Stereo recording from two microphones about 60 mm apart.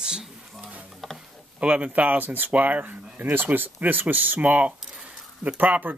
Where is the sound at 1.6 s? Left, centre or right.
Centre.